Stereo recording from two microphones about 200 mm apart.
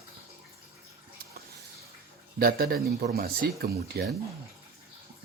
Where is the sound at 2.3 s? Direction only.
50° right (ahead or behind).